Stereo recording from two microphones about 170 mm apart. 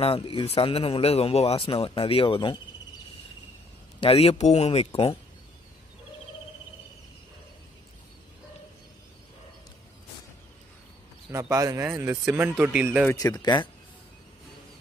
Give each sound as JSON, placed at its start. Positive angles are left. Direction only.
{"t": 0.0, "sound": "speech", "side_deg": 35}
{"t": 4.0, "sound": "speech", "side_deg": 35}
{"t": 11.3, "sound": "a man's voice", "side_deg": -15}
{"t": 13.1, "sound": "speech", "side_deg": 20}